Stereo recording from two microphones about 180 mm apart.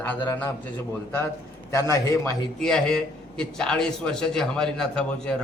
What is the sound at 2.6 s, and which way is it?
A man's voice, 5° left (ahead or behind).